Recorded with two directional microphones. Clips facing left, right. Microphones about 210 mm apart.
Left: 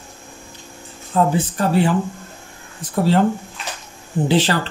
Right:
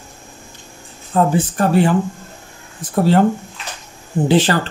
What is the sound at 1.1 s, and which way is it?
Speech, 50° right (ahead or behind).